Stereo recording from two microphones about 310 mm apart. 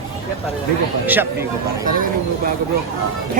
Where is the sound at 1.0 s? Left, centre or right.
Centre.